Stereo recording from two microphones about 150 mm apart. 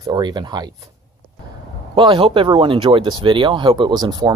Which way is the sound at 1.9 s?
35° right (ahead or behind).